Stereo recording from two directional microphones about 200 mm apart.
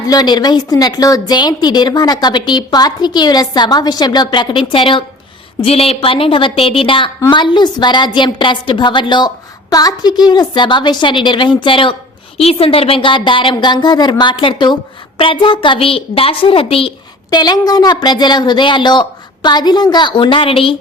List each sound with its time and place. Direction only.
0.1 s a woman's voice: 20° left (ahead or behind)